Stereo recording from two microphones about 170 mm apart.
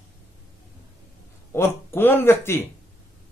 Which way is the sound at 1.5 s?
15° left (ahead or behind).